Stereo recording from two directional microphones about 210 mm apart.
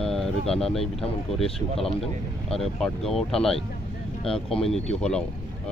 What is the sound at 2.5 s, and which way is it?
Speech, centre (ahead or behind).